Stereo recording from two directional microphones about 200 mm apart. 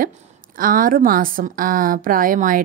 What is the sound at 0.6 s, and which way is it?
A woman's voice, 45° right (ahead or behind).